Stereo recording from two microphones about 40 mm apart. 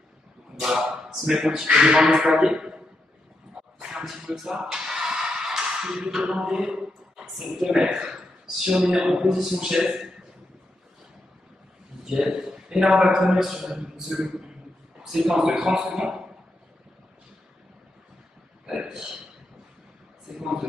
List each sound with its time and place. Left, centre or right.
0.6 s a sound: centre
1.1 s a man's voice: centre
1.5 s a man's voice: right
3.6 s a sound: centre
4.0 s a man's voice: centre
4.6 s music: centre
7.3 s a man's voice: centre
12.0 s a sound: centre
12.8 s speech: centre
13.1 s a man's voice: centre
18.8 s speech: centre
20.3 s a sound: centre